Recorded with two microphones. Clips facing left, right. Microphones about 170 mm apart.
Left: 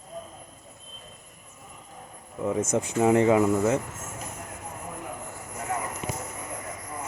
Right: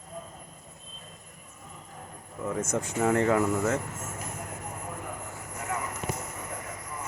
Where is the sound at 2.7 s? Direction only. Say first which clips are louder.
Left 4 dB; 20° left (ahead or behind).